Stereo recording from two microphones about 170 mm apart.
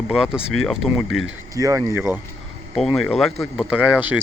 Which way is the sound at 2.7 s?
Centre (ahead or behind).